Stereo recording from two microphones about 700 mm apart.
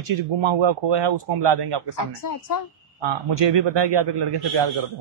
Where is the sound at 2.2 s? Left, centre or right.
Left.